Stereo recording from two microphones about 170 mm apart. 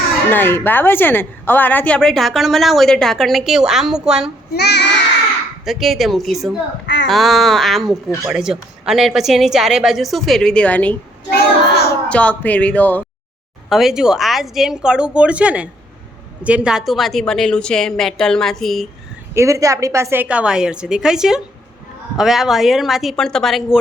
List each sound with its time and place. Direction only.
0.3 s a woman's voice: 10° left (ahead or behind); by 4.3 s 5° right (ahead or behind)
4.5 s child singing: 75° left (ahead or behind)
5.6 s a woman's voice: centre (ahead or behind)
6.8 s speech: 90° left
7.1 s a woman's voice: centre (ahead or behind)
11.3 s child singing: 70° left (ahead or behind)
12.0 s speech: 5° left (ahead or behind)
13.7 s a woman's voice: centre (ahead or behind)
19.3 s a woman's voice: 15° right (ahead or behind); by 23.8 s centre (ahead or behind)